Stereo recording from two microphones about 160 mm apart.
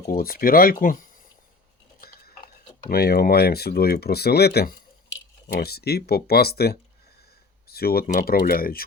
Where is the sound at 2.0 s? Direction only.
70° left (ahead or behind).